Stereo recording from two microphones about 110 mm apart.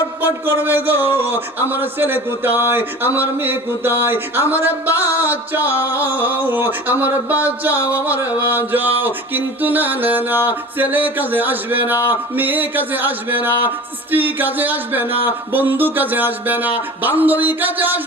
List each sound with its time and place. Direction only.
0.2 s speech: 20° right (ahead or behind)
3.2 s mantra: 15° right (ahead or behind)